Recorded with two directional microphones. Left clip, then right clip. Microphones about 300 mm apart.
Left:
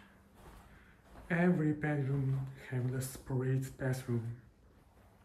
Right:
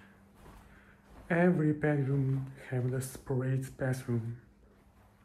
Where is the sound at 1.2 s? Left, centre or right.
Centre.